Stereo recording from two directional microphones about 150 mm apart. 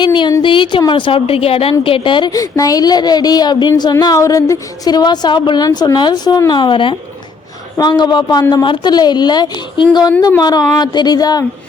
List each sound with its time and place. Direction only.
0.0 s a woman's voice: 30° left (ahead or behind)